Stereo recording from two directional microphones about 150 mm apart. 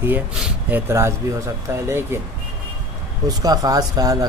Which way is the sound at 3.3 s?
25° right (ahead or behind).